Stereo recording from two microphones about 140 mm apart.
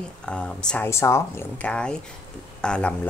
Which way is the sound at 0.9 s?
20° left (ahead or behind).